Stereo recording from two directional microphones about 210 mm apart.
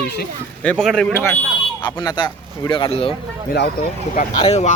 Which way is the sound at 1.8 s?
20° left (ahead or behind).